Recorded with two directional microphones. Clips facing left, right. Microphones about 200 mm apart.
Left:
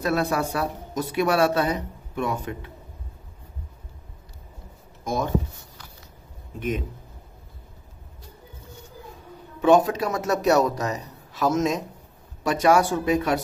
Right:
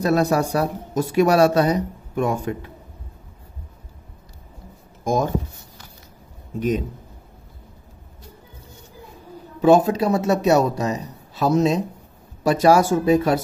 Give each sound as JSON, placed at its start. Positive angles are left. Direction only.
{"t": 0.0, "sound": "speech", "side_deg": -40}
{"t": 5.0, "sound": "speech", "side_deg": -45}
{"t": 9.6, "sound": "a man's voice", "side_deg": -35}